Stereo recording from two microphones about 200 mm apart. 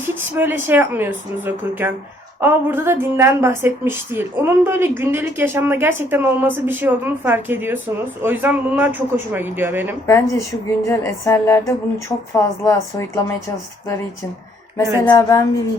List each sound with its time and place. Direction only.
0.1 s a woman's voice: 10° right (ahead or behind)
10.1 s speech: 15° left (ahead or behind)
15.1 s speech: 15° left (ahead or behind)